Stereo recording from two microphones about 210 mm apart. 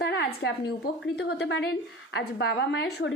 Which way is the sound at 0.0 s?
50° left (ahead or behind).